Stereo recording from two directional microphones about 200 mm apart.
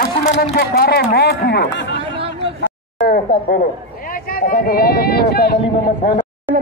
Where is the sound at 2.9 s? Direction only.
45° left (ahead or behind).